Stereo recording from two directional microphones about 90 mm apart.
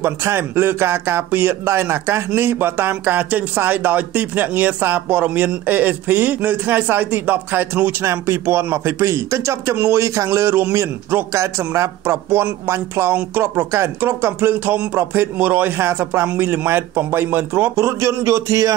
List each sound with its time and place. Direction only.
0.0 s speech: 25° right (ahead or behind)